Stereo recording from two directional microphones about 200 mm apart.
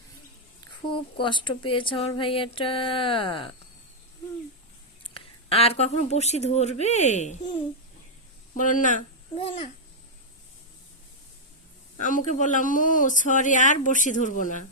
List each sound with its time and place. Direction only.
0.9 s speech: 25° left (ahead or behind)
5.1 s speech: 30° left (ahead or behind)
8.5 s speech: 40° left (ahead or behind)
11.9 s speech: 40° left (ahead or behind)